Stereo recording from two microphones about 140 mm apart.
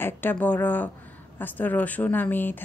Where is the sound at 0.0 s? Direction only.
15° left (ahead or behind).